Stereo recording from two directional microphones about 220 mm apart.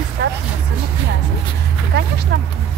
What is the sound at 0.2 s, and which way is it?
Vehicle, 50° right (ahead or behind).